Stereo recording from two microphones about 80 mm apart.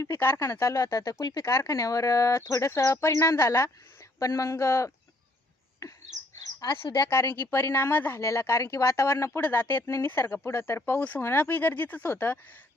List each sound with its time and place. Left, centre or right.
0.0 s speech: left
0.6 s speech: left
6.3 s bird: left
6.7 s speech: left
7.1 s speech: left